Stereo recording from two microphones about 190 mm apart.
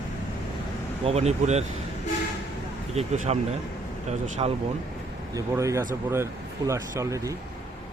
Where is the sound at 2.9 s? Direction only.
35° right (ahead or behind).